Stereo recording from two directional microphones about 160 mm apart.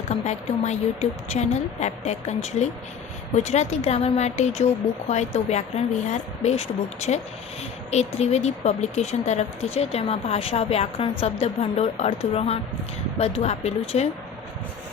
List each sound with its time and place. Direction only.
0.1 s speech: 45° left (ahead or behind)